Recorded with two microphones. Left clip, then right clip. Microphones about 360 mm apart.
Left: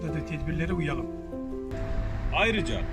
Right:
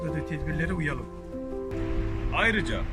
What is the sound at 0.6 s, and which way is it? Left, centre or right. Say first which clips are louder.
Speech: even; centre.